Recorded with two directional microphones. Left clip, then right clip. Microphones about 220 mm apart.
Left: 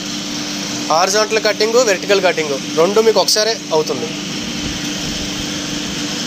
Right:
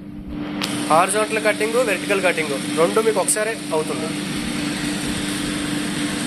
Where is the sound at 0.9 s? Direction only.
45° left (ahead or behind).